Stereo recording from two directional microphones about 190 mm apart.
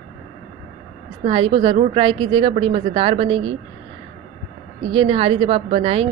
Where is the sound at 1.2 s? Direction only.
30° right (ahead or behind).